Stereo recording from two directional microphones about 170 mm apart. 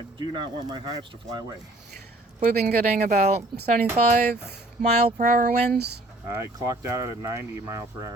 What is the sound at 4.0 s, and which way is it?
Speech, 40° right (ahead or behind).